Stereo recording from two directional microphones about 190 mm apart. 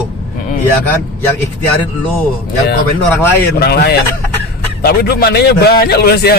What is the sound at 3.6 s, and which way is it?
A man's voice, 55° left (ahead or behind).